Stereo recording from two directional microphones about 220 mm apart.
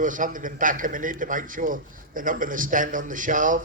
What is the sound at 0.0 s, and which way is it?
A man's voice, 35° right (ahead or behind).